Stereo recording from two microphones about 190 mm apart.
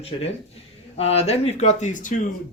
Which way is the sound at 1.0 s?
30° left (ahead or behind).